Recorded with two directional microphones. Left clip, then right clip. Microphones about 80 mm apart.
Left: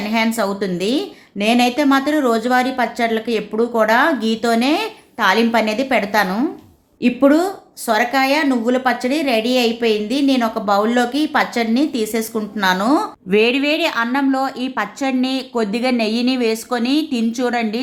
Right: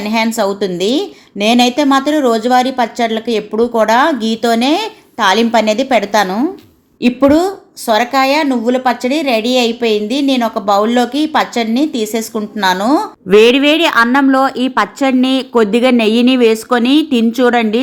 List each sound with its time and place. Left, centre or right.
0.0 s a woman's voice: right
6.2 s a woman's voice: right